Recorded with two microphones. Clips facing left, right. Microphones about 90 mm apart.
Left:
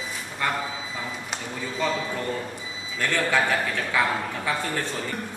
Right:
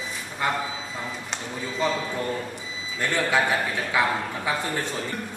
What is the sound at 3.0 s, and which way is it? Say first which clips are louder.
A man's voice: even; 15° right (ahead or behind).